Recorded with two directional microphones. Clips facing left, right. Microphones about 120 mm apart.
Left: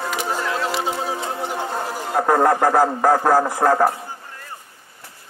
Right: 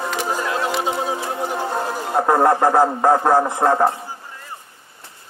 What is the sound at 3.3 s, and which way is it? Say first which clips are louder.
Speech: even; 20° right (ahead or behind).